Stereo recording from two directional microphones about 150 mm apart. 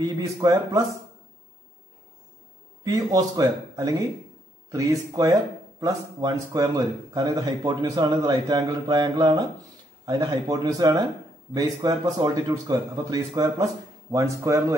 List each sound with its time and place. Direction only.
0.0 s a man's voice: 25° right (ahead or behind)
2.8 s a man's voice: 25° right (ahead or behind)